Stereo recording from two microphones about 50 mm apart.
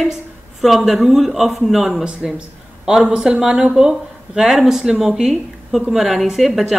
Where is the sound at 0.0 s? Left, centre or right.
Centre.